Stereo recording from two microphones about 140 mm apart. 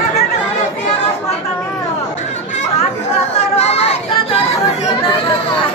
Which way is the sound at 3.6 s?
50° left (ahead or behind).